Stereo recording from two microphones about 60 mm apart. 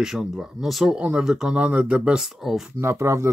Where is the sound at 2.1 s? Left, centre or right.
Centre.